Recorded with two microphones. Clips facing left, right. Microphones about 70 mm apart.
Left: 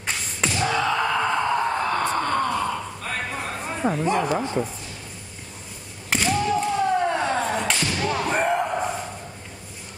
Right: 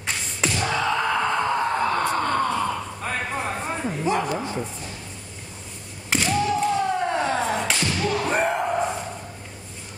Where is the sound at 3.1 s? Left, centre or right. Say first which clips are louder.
Right 2 dB; centre.